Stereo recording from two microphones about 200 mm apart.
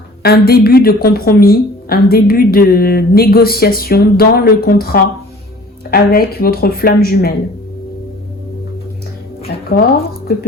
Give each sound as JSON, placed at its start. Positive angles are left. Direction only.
{"t": 0.2, "sound": "a woman's voice", "side_deg": 50}
{"t": 9.7, "sound": "a woman's voice", "side_deg": 45}